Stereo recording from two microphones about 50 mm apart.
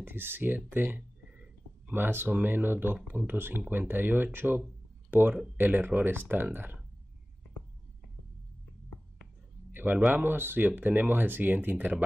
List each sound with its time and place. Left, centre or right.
0.0 s speech: right
9.7 s a sound: right
10.1 s speech: right